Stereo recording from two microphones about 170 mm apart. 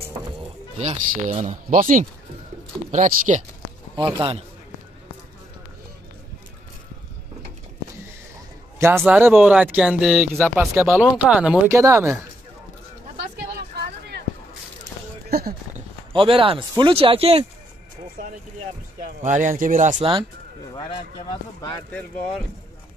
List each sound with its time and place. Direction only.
0.7 s speech: 40° right (ahead or behind)
3.9 s speech: 30° right (ahead or behind)
8.7 s speech: 15° right (ahead or behind)
13.6 s a sound: 75° right (ahead or behind)
15.2 s a sound: 65° right (ahead or behind)
16.1 s speech: 30° right (ahead or behind)
18.9 s speech: 50° right (ahead or behind)